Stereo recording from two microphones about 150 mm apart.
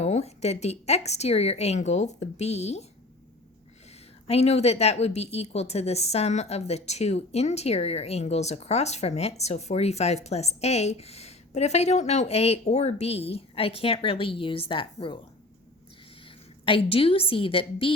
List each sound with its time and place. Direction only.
0.0 s a woman's voice: 45° left (ahead or behind)
4.3 s a woman's voice: 45° left (ahead or behind)
16.6 s a woman's voice: 35° left (ahead or behind)